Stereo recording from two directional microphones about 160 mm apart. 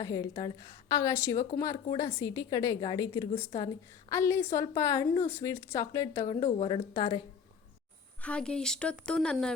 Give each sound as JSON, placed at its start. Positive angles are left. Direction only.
{"t": 0.0, "sound": "a woman's voice", "side_deg": 20}
{"t": 6.6, "sound": "a woman's voice", "side_deg": 30}
{"t": 8.2, "sound": "speech", "side_deg": 5}